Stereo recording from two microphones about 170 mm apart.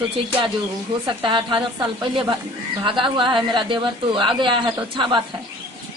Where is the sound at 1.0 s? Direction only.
30° right (ahead or behind).